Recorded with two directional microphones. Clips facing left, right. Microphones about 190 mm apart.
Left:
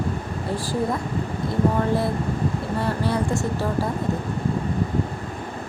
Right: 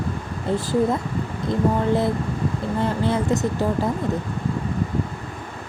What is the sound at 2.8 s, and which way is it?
Speech, 20° right (ahead or behind).